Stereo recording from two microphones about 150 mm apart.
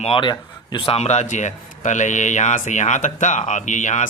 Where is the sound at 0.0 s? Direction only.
35° left (ahead or behind).